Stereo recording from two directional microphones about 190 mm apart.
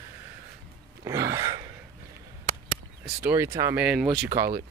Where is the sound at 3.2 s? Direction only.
10° right (ahead or behind).